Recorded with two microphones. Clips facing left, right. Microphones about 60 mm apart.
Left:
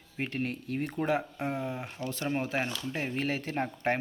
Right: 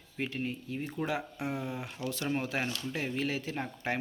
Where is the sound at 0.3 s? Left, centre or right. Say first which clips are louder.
Left 6 dB; left.